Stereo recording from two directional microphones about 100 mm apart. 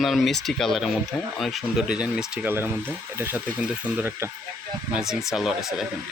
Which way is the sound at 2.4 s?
20° right (ahead or behind).